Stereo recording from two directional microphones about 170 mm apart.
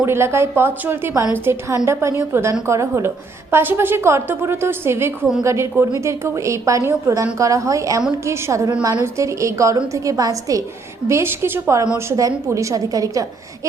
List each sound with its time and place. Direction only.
0.0 s a woman's voice: 15° right (ahead or behind)